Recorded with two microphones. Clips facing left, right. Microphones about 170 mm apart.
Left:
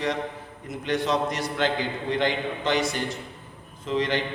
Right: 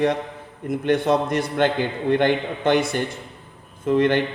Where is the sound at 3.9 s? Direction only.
55° right (ahead or behind).